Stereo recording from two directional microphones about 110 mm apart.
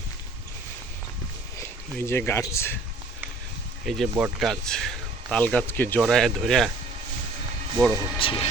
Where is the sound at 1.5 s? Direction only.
25° left (ahead or behind).